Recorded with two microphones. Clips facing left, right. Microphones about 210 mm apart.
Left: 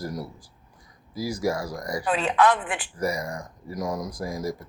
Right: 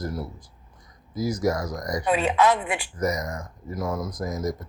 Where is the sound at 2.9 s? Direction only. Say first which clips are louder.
Right 1 dB; 30° left (ahead or behind).